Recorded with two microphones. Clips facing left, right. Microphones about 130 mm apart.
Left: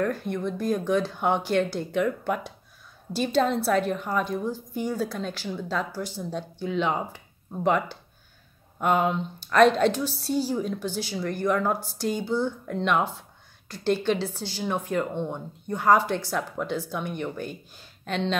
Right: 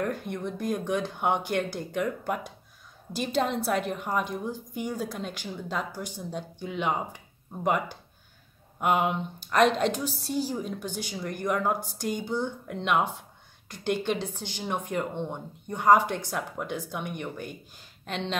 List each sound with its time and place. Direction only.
0.0 s a woman's voice: 20° right (ahead or behind)
8.7 s a woman's voice: 10° right (ahead or behind)